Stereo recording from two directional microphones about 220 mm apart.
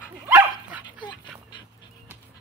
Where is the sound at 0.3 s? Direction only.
10° right (ahead or behind).